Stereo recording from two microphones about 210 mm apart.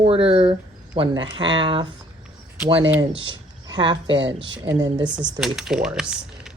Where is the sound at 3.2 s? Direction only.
20° right (ahead or behind).